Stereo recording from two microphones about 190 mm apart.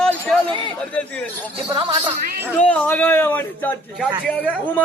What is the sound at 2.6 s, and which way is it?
Speech, 5° left (ahead or behind).